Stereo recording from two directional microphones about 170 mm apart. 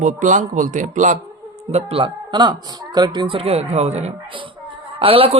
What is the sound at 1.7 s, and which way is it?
Speech, 35° right (ahead or behind).